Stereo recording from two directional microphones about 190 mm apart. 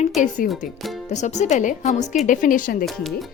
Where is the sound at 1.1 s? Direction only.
40° left (ahead or behind).